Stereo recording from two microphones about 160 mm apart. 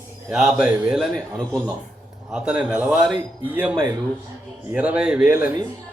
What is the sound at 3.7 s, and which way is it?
Speech, 25° right (ahead or behind).